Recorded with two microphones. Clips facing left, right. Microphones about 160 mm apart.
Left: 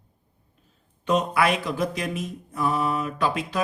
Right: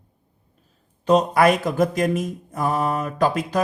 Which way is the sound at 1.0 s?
40° right (ahead or behind).